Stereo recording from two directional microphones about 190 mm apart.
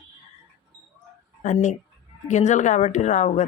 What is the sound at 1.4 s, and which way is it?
A woman's voice, 40° left (ahead or behind).